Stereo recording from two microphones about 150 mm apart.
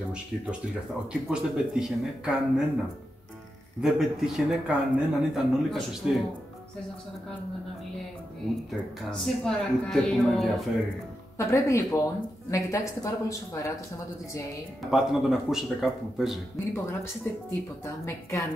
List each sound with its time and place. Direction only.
1.3 s speech: 5° right (ahead or behind)
3.8 s speech: 5° right (ahead or behind)
9.1 s speech: 5° left (ahead or behind)
11.3 s speech: 20° left (ahead or behind)
14.9 s speech: centre (ahead or behind)
16.5 s speech: 15° left (ahead or behind)